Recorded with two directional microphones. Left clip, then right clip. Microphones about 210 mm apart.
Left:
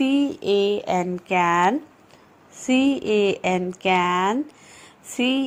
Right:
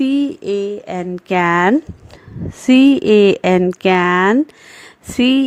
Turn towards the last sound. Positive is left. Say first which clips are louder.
# right 8 dB
turn(degrees=-45)  # may be behind; listen again after turning